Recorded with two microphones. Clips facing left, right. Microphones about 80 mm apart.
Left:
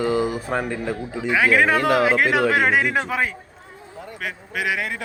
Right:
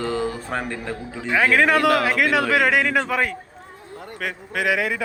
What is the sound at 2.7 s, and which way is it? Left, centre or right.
Speech, right.